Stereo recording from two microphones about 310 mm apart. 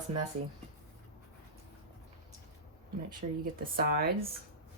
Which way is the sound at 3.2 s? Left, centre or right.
Right.